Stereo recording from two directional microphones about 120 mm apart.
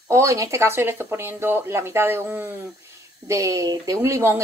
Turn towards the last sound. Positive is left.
turn(degrees=-20)  # may be behind; listen again after turning